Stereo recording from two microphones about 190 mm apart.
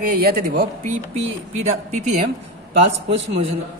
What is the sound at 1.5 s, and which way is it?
Speech, 35° right (ahead or behind).